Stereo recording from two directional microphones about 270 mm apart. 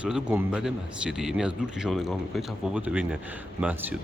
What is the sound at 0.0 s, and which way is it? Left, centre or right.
Speech, centre.